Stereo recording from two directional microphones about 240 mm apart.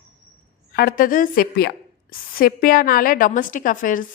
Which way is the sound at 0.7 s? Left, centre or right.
Left.